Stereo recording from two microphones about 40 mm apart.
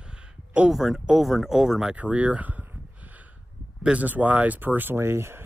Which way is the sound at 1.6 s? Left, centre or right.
Centre.